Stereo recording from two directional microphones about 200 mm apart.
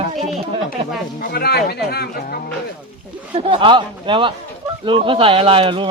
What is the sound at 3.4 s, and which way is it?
A child's voice, 25° right (ahead or behind).